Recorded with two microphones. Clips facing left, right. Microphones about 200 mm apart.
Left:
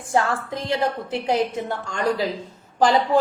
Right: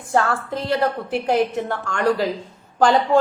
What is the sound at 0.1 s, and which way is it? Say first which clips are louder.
A woman's voice: right 2 dB; 15° left (ahead or behind).